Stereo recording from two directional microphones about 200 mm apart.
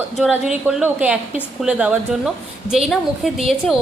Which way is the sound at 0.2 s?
Centre (ahead or behind).